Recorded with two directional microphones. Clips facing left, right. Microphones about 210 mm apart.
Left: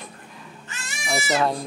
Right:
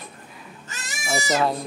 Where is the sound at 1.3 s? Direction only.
Centre (ahead or behind).